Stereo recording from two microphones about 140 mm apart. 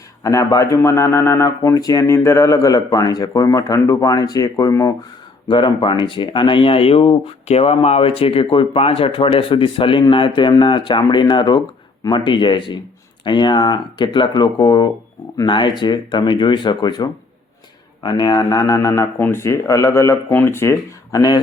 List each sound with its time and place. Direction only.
0.2 s speech: 25° left (ahead or behind)
5.5 s speech: 35° left (ahead or behind)